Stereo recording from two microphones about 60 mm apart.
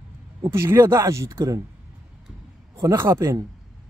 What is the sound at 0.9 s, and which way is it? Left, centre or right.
Speech, right.